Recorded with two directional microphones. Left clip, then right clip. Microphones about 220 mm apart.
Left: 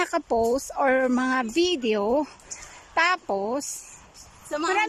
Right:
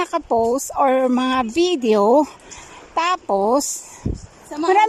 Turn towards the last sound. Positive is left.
turn(degrees=-20)  # may be behind; listen again after turning